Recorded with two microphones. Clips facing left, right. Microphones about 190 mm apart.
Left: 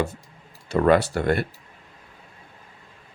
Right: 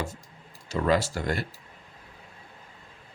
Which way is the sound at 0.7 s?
60° left (ahead or behind).